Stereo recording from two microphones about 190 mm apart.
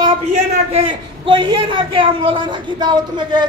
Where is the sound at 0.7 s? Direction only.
25° right (ahead or behind).